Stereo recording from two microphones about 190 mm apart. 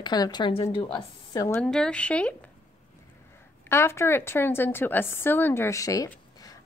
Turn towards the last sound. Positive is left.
turn(degrees=20)  # may be behind; listen again after turning